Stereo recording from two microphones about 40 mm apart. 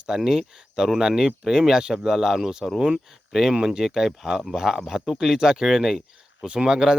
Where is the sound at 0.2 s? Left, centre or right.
Centre.